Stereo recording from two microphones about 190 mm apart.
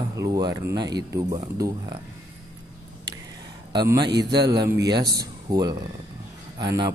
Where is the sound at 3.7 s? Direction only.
20° right (ahead or behind).